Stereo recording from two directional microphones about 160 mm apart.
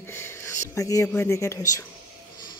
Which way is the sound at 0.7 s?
20° left (ahead or behind).